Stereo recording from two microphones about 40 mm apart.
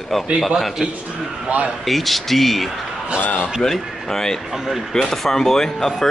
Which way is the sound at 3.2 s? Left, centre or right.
Left.